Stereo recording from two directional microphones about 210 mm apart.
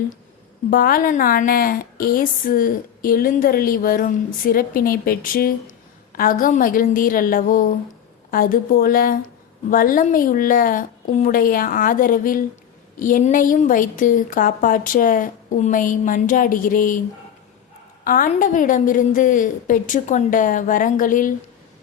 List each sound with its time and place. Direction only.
0.7 s a woman's voice: 45° left (ahead or behind)
18.0 s a woman's voice: 40° left (ahead or behind)